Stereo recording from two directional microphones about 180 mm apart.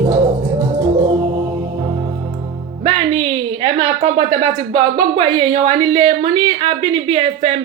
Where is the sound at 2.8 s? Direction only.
30° right (ahead or behind).